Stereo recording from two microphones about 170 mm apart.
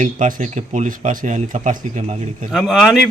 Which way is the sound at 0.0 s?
50° right (ahead or behind).